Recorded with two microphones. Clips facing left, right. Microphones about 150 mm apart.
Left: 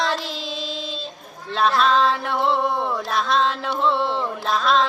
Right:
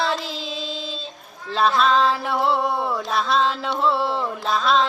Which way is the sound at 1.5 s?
Centre (ahead or behind).